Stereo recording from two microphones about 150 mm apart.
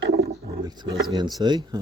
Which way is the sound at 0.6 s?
25° right (ahead or behind).